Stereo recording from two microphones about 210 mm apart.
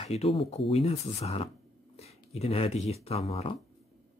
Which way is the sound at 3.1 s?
30° left (ahead or behind).